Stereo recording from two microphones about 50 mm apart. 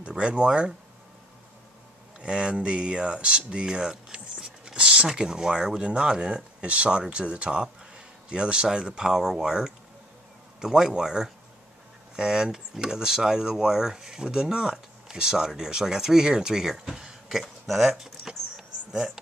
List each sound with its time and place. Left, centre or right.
0.0 s speech: centre
2.1 s speech: centre
17.9 s vehicle: centre
18.9 s speech: centre